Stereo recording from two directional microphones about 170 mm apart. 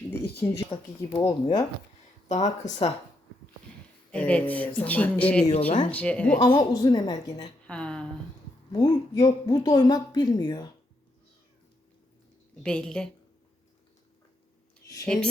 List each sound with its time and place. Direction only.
0.1 s a sound: 15° left (ahead or behind)
0.7 s speech: 25° left (ahead or behind)
2.3 s speech: 45° left (ahead or behind)
4.1 s speech: 10° left (ahead or behind)
5.5 s speech: 40° left (ahead or behind)
5.9 s speech: 10° left (ahead or behind)
6.4 s speech: 25° left (ahead or behind)
7.7 s speech: 5° left (ahead or behind)
8.7 s speech: 25° left (ahead or behind)
12.6 s a woman's voice: 5° left (ahead or behind)
15.0 s a woman's voice: 5° left (ahead or behind)